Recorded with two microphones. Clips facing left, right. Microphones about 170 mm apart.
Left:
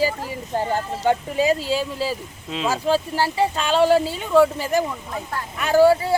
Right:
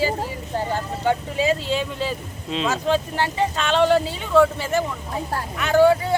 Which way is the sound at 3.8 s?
40° left (ahead or behind).